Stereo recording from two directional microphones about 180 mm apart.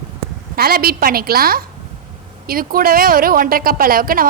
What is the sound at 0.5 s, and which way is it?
A woman's voice, 55° right (ahead or behind).